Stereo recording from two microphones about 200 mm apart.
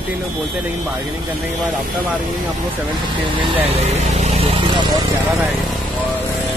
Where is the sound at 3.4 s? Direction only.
30° right (ahead or behind).